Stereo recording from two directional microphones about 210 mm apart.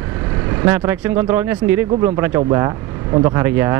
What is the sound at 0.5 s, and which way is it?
Speech, 15° right (ahead or behind).